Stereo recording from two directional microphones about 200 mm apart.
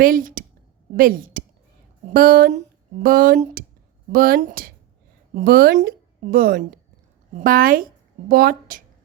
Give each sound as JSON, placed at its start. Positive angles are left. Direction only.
{"t": 0.0, "sound": "speech", "side_deg": -45}